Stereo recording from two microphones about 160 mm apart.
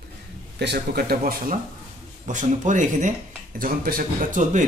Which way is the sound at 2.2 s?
50° right (ahead or behind).